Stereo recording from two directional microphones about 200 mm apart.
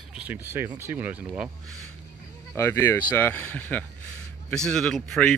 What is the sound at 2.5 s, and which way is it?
Speech, 15° left (ahead or behind).